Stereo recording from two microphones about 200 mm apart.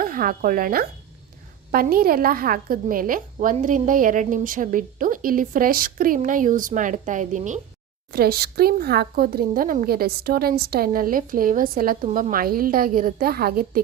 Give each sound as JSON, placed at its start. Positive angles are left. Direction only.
{"t": 0.0, "sound": "a woman's voice", "side_deg": -45}
{"t": 8.1, "sound": "a woman's voice", "side_deg": -50}